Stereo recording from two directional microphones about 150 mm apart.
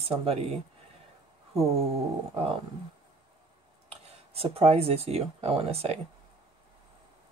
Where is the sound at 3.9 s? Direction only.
40° right (ahead or behind).